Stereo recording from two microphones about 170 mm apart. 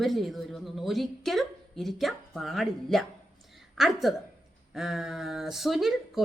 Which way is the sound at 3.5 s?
Centre (ahead or behind).